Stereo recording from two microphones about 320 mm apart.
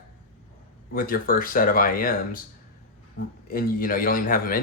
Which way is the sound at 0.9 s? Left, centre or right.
Left.